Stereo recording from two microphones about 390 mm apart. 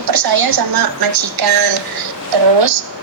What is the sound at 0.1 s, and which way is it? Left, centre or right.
Speech, right.